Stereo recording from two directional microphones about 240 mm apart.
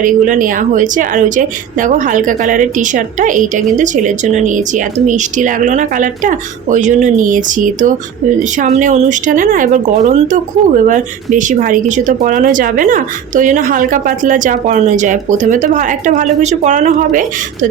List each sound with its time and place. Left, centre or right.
0.0 s speech: right